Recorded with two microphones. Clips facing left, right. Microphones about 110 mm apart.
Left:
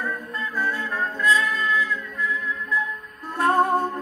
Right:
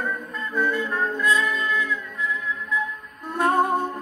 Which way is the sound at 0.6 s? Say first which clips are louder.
Right 3 dB; centre (ahead or behind).